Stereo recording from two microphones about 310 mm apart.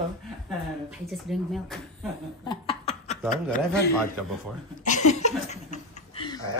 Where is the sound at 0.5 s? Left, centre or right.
Centre.